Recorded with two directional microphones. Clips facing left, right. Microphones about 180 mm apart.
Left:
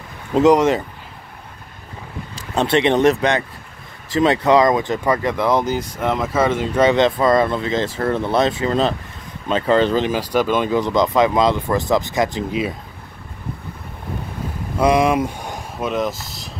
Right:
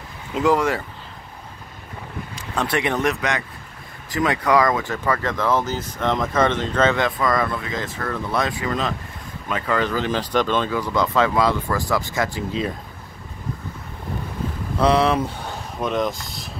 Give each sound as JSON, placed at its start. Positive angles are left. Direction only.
{"t": 0.4, "sound": "speech", "side_deg": 20}
{"t": 2.3, "sound": "speech", "side_deg": 25}
{"t": 7.1, "sound": "speech", "side_deg": 25}
{"t": 10.0, "sound": "speech", "side_deg": 10}
{"t": 10.7, "sound": "speech", "side_deg": 20}
{"t": 14.8, "sound": "a sound", "side_deg": 10}
{"t": 15.9, "sound": "speech", "side_deg": 5}